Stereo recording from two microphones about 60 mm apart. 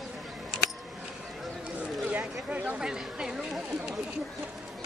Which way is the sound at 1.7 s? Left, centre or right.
Right.